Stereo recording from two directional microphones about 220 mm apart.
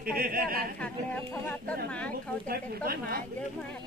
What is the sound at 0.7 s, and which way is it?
A woman's voice, 5° left (ahead or behind).